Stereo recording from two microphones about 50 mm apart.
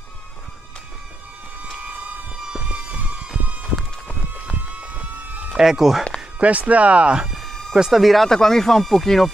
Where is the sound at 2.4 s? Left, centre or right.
Centre.